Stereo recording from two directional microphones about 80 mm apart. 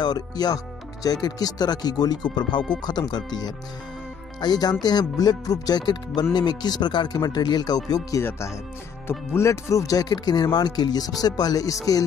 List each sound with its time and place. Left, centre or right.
0.0 s speech: left
8.2 s speech: left